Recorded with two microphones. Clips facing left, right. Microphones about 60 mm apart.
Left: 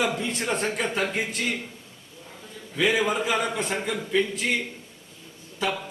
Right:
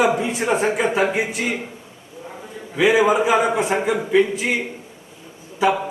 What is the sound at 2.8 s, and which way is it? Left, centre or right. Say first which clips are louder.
A man's voice: right 8 dB; centre.